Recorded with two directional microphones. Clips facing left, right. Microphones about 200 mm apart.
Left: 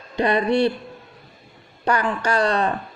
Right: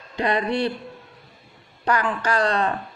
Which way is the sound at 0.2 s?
25° left (ahead or behind).